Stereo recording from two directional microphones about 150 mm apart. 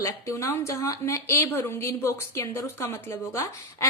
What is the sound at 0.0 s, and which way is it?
A woman's voice, 20° left (ahead or behind).